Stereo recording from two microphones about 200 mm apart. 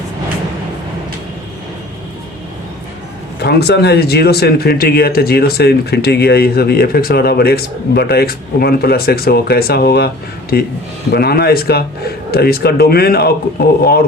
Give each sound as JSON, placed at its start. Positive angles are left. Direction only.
{"t": 3.4, "sound": "speech", "side_deg": 55}